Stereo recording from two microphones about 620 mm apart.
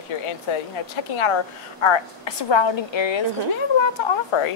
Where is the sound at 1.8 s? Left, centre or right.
Left.